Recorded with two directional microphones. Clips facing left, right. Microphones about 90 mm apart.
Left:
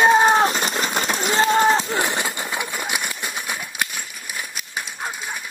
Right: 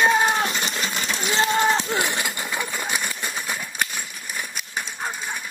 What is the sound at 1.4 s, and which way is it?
Speech, 35° left (ahead or behind).